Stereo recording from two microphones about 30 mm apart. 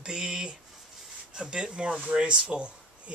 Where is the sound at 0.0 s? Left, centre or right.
Right.